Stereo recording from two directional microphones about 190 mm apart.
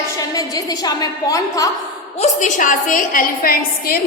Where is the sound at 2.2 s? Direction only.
40° left (ahead or behind).